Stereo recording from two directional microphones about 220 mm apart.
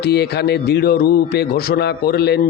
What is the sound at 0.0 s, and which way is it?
Speech, 45° left (ahead or behind).